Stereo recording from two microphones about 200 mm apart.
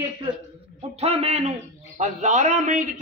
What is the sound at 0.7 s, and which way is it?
A man's voice, 30° right (ahead or behind).